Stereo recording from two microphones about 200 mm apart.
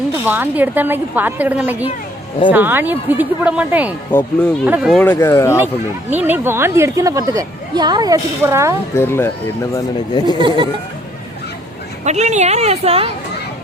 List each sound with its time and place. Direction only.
0.3 s speech: 10° right (ahead or behind)
4.1 s speech: 10° left (ahead or behind)
4.6 s speech: 5° right (ahead or behind); by 5.6 s 15° left (ahead or behind)
6.1 s speech: 10° right (ahead or behind)
9.0 s speech: 10° left (ahead or behind)
12.0 s speech: 35° right (ahead or behind)